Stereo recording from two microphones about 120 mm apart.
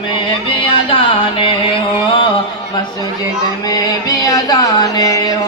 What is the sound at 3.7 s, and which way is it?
Music, 30° left (ahead or behind).